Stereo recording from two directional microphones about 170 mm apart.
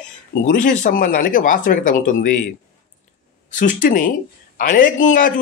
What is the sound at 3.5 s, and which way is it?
Speech, 50° left (ahead or behind).